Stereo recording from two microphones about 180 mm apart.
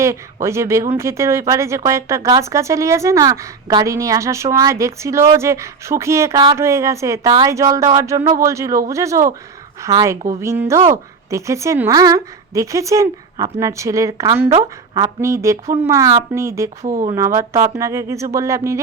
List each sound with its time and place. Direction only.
0.4 s speech: 15° right (ahead or behind)
16.8 s speech: 45° right (ahead or behind)
17.2 s speech: 15° right (ahead or behind)